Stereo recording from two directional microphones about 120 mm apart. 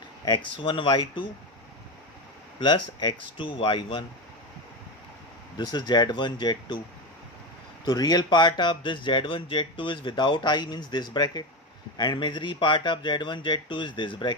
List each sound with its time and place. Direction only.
0.3 s speech: 45° left (ahead or behind)
2.6 s speech: 40° left (ahead or behind)
5.5 s speech: 35° left (ahead or behind)
7.9 s speech: 35° left (ahead or behind)